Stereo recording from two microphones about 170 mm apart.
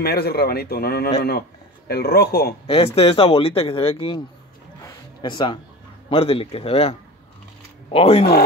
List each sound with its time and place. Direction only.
0.0 s speech: 65° left (ahead or behind)
2.6 s speech: 35° left (ahead or behind)
4.8 s a sound: 25° left (ahead or behind)
6.0 s speech: 35° left (ahead or behind)